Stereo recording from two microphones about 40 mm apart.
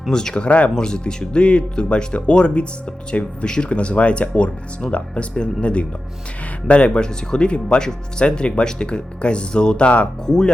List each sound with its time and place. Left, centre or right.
0.1 s speech: centre
5.3 s speech: left